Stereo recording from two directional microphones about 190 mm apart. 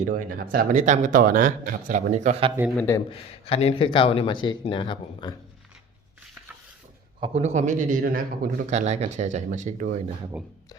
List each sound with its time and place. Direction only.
0.0 s speech: 45° right (ahead or behind)
2.7 s speech: 15° left (ahead or behind)
3.1 s speech: 30° left (ahead or behind)
7.2 s a man's voice: 35° right (ahead or behind)